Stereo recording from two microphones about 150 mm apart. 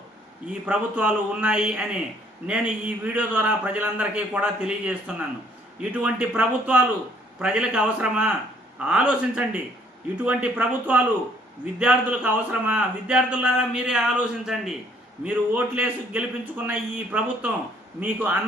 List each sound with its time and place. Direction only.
0.6 s a man's voice: 10° right (ahead or behind)